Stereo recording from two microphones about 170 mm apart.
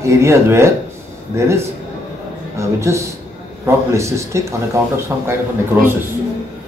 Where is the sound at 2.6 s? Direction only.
15° right (ahead or behind).